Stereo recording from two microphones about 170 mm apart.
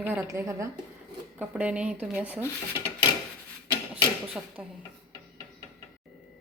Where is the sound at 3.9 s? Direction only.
5° right (ahead or behind).